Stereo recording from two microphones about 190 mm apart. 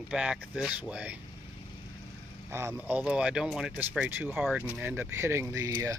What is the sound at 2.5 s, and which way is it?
Speech, 15° right (ahead or behind).